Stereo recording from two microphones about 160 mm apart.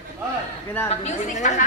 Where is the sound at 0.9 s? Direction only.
45° left (ahead or behind).